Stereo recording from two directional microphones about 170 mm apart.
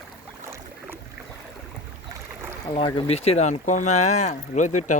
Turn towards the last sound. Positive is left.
turn(degrees=45)  # may be behind; listen again after turning